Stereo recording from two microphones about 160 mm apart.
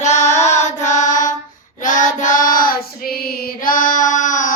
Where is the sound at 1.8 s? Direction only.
55° left (ahead or behind).